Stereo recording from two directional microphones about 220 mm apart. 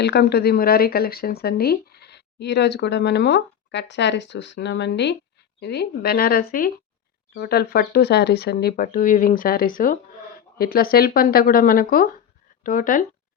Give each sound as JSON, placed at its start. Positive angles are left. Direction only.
{"t": 0.0, "sound": "speech", "side_deg": 50}